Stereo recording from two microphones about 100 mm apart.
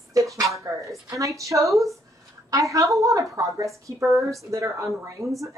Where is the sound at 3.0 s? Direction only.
35° right (ahead or behind).